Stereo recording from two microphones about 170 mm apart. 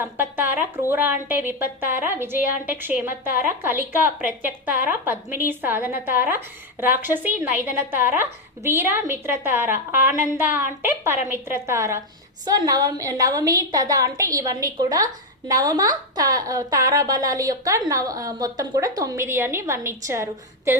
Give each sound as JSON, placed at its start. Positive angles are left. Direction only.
{"t": 0.0, "sound": "a woman's voice", "side_deg": -10}